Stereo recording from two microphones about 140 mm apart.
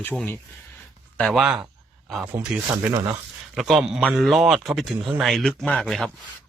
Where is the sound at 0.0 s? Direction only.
10° left (ahead or behind).